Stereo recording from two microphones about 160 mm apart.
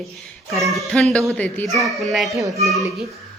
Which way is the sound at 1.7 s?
Centre (ahead or behind).